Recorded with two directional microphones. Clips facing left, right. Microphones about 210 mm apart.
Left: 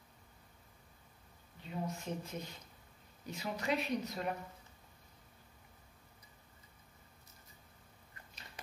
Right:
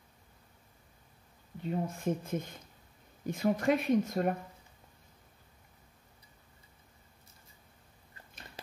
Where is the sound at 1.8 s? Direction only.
50° right (ahead or behind).